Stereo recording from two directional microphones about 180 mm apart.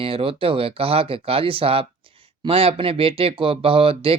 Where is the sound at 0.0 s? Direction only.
30° right (ahead or behind).